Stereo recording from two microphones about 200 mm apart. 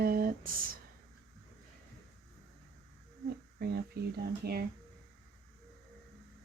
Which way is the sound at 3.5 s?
50° right (ahead or behind).